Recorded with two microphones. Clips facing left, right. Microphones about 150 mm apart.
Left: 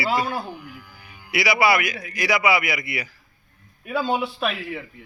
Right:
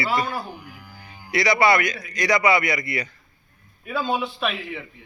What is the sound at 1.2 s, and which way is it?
A man's voice, 5° left (ahead or behind).